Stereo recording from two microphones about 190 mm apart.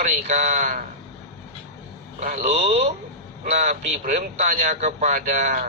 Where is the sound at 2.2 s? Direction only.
35° right (ahead or behind).